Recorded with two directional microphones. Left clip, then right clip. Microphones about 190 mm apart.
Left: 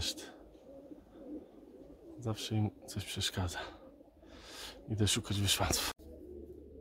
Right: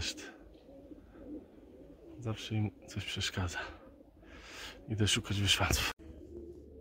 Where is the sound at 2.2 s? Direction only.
20° left (ahead or behind).